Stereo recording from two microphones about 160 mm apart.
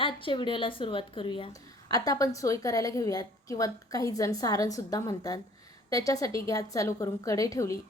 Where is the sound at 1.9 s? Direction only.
20° left (ahead or behind).